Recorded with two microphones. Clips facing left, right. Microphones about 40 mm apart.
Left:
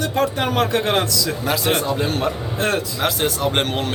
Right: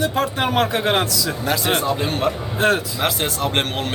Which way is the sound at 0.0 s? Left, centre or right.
Centre.